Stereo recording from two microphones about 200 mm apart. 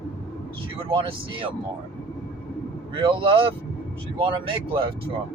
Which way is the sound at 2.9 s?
25° right (ahead or behind).